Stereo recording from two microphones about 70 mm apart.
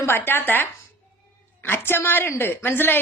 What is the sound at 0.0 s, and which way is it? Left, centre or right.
A woman's voice, left.